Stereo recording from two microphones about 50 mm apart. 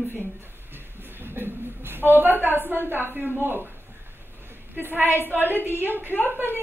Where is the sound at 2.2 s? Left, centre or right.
Right.